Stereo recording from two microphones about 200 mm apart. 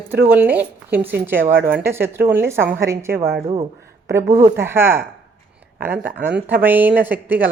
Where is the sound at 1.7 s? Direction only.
10° right (ahead or behind).